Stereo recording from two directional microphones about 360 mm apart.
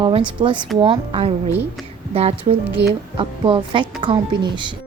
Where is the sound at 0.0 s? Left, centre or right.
Centre.